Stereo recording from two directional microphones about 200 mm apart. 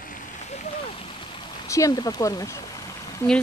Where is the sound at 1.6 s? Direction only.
15° left (ahead or behind).